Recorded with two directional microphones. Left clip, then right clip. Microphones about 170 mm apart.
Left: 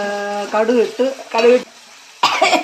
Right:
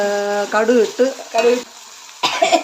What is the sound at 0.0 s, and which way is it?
Speech, 15° right (ahead or behind).